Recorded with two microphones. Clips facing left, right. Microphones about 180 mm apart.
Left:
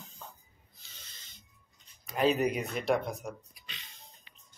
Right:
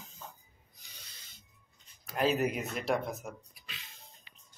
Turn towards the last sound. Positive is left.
turn(degrees=-5)  # may be behind; listen again after turning